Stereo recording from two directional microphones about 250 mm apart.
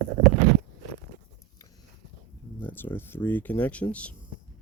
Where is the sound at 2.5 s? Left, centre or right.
Centre.